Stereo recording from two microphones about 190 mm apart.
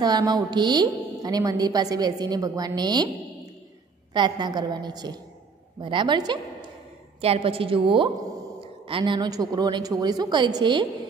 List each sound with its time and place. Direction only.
0.0 s a woman's voice: 20° right (ahead or behind)
4.1 s a woman's voice: 20° right (ahead or behind)